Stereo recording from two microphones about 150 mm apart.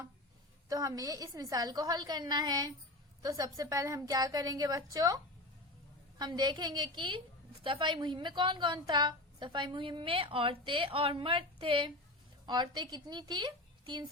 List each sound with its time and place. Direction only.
0.7 s a woman's voice: 25° right (ahead or behind)